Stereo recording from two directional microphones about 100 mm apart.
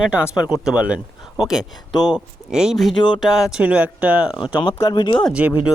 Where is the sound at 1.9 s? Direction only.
45° left (ahead or behind).